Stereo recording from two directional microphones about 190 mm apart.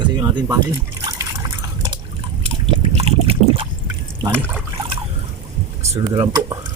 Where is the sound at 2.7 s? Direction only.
30° right (ahead or behind).